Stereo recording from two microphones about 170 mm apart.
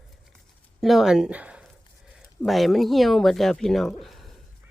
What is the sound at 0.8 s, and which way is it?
Speech, centre (ahead or behind).